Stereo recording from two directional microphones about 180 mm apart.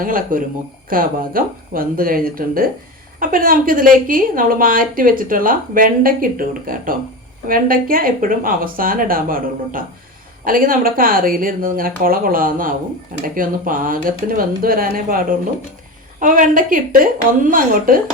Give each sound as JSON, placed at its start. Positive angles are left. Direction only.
{"t": 0.0, "sound": "a woman's voice", "side_deg": -50}